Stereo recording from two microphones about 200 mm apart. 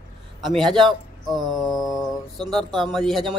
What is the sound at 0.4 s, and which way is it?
A man's voice, centre (ahead or behind).